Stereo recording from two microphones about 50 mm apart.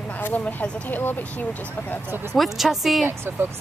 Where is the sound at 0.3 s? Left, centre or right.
Left.